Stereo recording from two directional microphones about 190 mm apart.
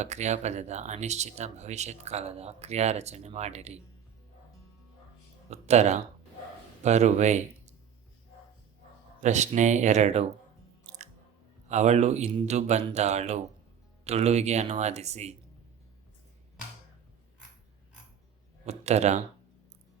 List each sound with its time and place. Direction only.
0.0 s speech: 35° right (ahead or behind)
5.5 s speech: 35° right (ahead or behind)
9.2 s speech: 40° right (ahead or behind)
11.7 s speech: 35° right (ahead or behind)
18.6 s a sound: 35° right (ahead or behind)